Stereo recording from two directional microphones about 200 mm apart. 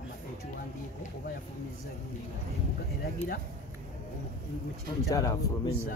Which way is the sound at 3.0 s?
50° left (ahead or behind).